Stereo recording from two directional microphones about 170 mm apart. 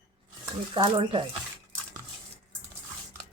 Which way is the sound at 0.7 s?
30° right (ahead or behind).